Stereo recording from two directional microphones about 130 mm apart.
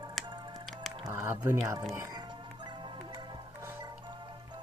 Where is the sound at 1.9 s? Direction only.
20° right (ahead or behind).